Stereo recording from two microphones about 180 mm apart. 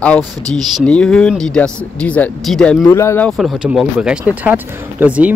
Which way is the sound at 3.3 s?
Centre (ahead or behind).